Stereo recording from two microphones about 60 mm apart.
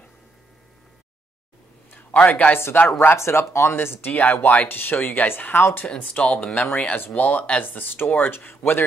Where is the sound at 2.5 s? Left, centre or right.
Left.